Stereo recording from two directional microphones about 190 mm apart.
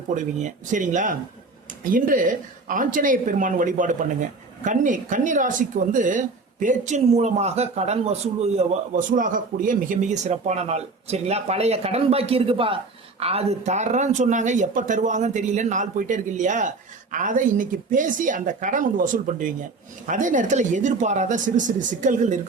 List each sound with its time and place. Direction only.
0.1 s speech: 40° right (ahead or behind)